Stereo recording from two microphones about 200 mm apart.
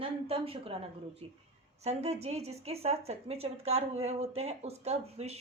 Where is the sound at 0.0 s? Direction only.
30° right (ahead or behind).